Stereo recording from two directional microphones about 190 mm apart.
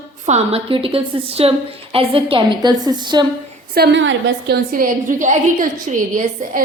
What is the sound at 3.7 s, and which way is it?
Speech, 60° right (ahead or behind).